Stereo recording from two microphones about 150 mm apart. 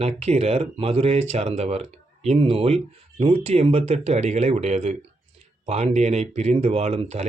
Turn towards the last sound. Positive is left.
turn(degrees=-45)  # may be behind; listen again after turning